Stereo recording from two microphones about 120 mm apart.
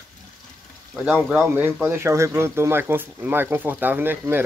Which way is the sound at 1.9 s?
20° right (ahead or behind).